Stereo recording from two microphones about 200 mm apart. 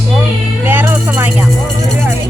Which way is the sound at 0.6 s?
10° right (ahead or behind).